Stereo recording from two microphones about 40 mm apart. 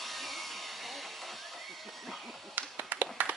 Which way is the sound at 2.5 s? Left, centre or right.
Right.